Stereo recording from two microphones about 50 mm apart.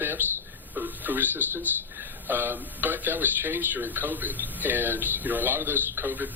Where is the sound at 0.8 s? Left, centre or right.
Right.